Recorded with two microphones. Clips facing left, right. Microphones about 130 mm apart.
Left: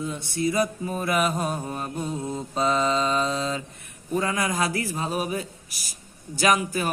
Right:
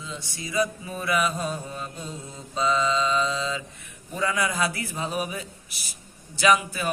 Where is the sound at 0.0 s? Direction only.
55° left (ahead or behind).